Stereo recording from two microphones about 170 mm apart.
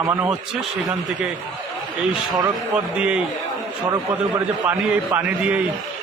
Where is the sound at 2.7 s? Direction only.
5° right (ahead or behind).